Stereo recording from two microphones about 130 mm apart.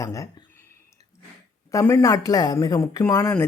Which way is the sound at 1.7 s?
20° left (ahead or behind).